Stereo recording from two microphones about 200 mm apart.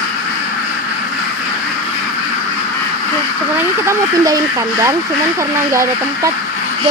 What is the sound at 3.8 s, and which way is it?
Speech, 15° right (ahead or behind).